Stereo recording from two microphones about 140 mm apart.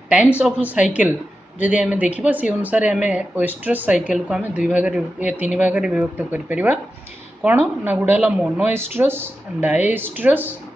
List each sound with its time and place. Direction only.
0.4 s speech: 10° right (ahead or behind)
8.7 s speech: 15° right (ahead or behind)